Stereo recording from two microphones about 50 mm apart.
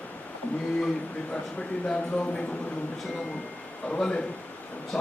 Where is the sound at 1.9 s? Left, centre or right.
Left.